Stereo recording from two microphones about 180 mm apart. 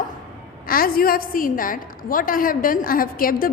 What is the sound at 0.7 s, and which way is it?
A woman's voice, 55° left (ahead or behind).